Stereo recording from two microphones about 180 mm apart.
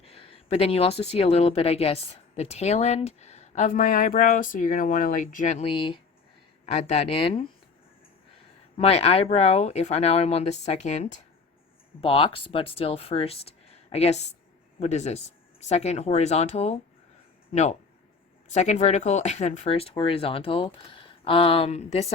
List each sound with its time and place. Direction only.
0.0 s speech: 30° left (ahead or behind)
6.7 s speech: 40° left (ahead or behind)
8.8 s speech: 35° left (ahead or behind)